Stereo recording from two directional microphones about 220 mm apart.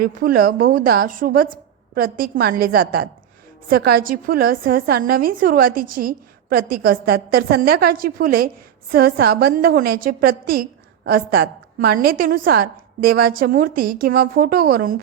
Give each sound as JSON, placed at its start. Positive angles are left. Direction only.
{"t": 0.0, "sound": "a woman's voice", "side_deg": -40}